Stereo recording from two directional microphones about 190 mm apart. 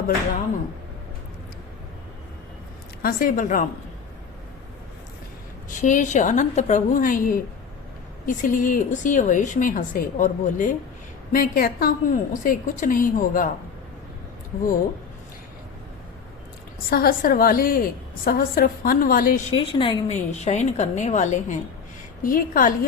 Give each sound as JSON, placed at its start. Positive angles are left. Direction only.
{"t": 3.0, "sound": "speech", "side_deg": 50}
{"t": 5.6, "sound": "a woman's voice", "side_deg": 40}
{"t": 16.9, "sound": "speech", "side_deg": 50}
{"t": 19.5, "sound": "a woman's voice", "side_deg": 30}